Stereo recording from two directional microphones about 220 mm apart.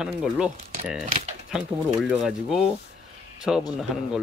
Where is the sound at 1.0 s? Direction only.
35° right (ahead or behind).